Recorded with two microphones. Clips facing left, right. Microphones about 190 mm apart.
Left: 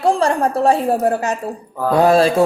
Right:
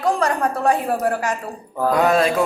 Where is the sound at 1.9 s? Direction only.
30° left (ahead or behind).